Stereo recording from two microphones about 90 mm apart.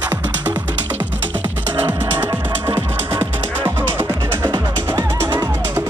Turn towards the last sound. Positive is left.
turn(degrees=-60)  # may be behind; listen again after turning